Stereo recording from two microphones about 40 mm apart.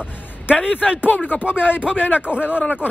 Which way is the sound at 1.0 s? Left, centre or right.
Left.